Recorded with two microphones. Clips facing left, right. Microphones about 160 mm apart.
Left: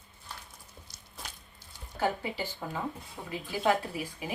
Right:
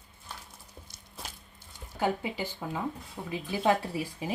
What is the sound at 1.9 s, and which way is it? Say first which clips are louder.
Speech: right 1 dB; 15° right (ahead or behind).